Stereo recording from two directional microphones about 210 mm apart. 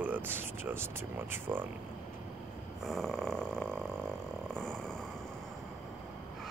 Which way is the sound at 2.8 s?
Centre (ahead or behind).